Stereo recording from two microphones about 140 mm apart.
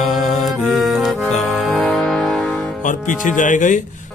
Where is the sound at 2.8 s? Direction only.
65° left (ahead or behind).